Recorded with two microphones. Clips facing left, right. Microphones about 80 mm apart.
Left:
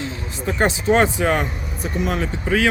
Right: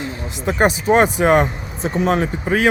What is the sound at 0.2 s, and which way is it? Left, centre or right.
Speech, centre.